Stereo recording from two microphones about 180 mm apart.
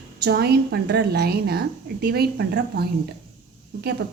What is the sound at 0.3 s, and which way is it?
Speech, 65° right (ahead or behind).